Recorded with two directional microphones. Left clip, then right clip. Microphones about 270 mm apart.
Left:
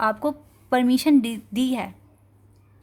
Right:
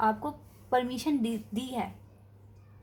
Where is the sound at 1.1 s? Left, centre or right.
Left.